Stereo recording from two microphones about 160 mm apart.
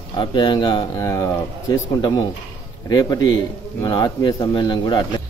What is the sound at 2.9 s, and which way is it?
Speech, 25° left (ahead or behind).